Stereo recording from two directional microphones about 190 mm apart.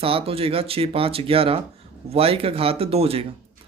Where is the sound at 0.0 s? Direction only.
30° right (ahead or behind).